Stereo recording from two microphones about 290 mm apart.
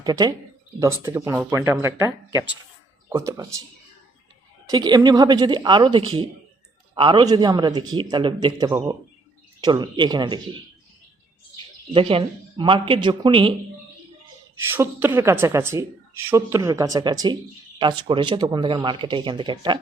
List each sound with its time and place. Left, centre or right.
0.0 s a woman's voice: centre
4.6 s a woman's voice: centre
11.5 s speech: centre
14.7 s a woman's voice: centre